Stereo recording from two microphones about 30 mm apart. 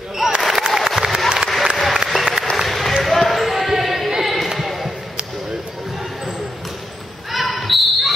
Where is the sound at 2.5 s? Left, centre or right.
Centre.